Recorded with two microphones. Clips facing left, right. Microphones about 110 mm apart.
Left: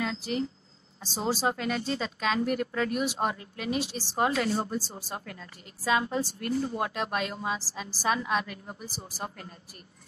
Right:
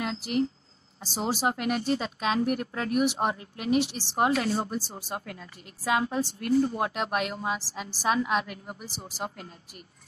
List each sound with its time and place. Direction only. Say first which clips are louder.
0.0 s speech: right 3 dB; 10° right (ahead or behind)